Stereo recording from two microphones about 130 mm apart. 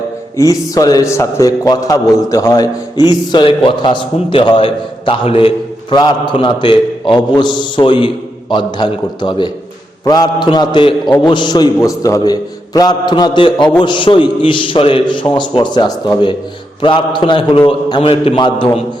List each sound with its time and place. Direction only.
0.3 s a man's voice: 25° left (ahead or behind); by 6.0 s 45° left (ahead or behind)
6.0 s a man's voice: 35° left (ahead or behind)